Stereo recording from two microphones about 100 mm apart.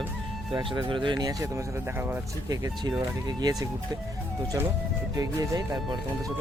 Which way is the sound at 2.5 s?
40° right (ahead or behind).